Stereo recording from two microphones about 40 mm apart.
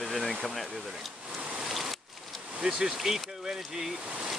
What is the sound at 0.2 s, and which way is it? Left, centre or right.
Speech, centre.